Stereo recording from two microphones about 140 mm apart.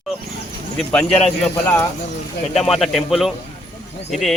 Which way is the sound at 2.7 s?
Centre (ahead or behind).